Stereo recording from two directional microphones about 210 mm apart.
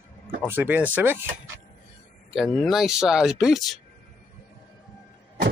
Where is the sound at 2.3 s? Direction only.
Centre (ahead or behind).